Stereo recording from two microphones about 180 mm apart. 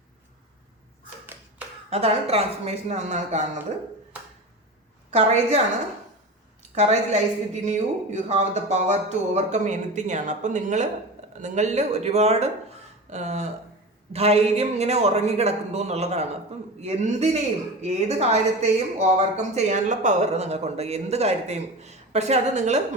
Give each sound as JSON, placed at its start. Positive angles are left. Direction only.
{"t": 1.9, "sound": "speech", "side_deg": -35}
{"t": 5.1, "sound": "speech", "side_deg": -35}
{"t": 6.7, "sound": "speech", "side_deg": -40}